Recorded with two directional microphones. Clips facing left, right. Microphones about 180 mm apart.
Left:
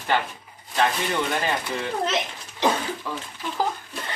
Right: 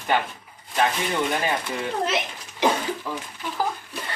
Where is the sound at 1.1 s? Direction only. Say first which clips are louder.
Right 1 dB; 10° right (ahead or behind).